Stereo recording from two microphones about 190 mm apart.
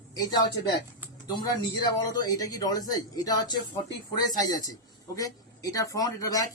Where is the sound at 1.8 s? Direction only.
20° left (ahead or behind).